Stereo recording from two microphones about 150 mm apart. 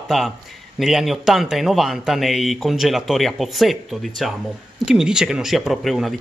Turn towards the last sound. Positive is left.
turn(degrees=0)  # may be behind; listen again after turning